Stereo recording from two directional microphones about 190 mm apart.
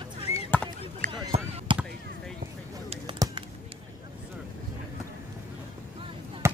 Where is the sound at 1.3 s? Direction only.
30° right (ahead or behind).